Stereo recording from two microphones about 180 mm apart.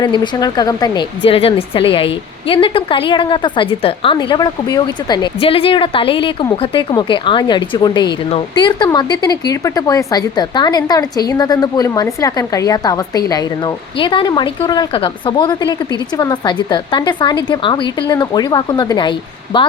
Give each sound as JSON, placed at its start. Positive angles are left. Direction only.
{"t": 0.3, "sound": "speech", "side_deg": 20}